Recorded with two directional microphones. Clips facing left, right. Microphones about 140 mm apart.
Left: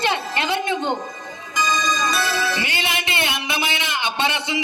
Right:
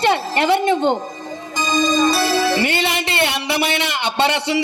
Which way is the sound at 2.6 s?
55° right (ahead or behind).